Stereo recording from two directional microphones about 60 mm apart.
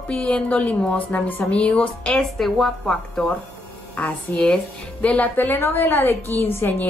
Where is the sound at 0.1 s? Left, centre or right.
Left.